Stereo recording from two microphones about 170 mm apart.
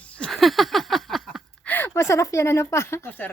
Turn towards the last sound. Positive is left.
turn(degrees=10)  # may be behind; listen again after turning